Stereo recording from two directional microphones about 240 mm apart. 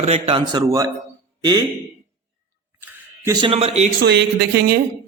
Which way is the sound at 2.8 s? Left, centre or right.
Centre.